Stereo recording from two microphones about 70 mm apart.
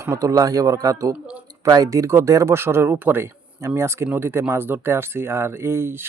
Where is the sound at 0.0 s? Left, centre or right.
Right.